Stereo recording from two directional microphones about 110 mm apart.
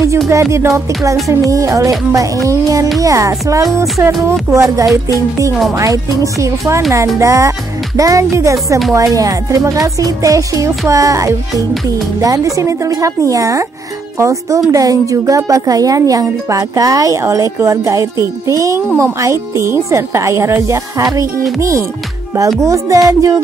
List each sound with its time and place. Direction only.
0.3 s speech: 25° right (ahead or behind)
6.9 s a woman's voice: 30° right (ahead or behind)